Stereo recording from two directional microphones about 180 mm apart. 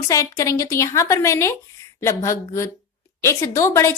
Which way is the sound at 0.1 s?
20° left (ahead or behind).